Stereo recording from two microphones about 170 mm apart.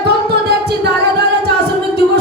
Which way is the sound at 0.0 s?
75° right (ahead or behind).